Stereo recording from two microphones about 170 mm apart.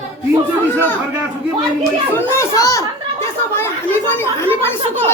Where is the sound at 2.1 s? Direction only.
15° left (ahead or behind).